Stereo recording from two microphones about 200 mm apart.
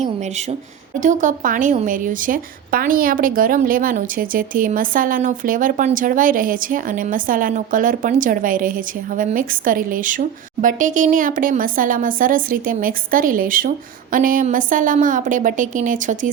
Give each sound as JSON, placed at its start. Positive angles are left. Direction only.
{"t": 0.9, "sound": "a woman's voice", "side_deg": -40}